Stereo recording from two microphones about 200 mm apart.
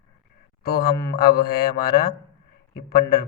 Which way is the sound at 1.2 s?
50° left (ahead or behind).